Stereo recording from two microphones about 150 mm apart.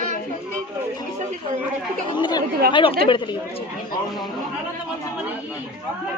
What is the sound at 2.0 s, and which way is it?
A woman's voice, 30° left (ahead or behind).